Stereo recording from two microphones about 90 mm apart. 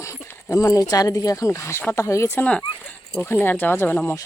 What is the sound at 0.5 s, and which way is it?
Speech, 35° left (ahead or behind).